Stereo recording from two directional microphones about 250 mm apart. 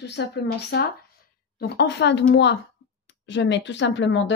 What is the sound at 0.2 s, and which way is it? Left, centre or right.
Speech, left.